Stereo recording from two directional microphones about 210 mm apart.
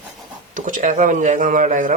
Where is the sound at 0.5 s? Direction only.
40° right (ahead or behind).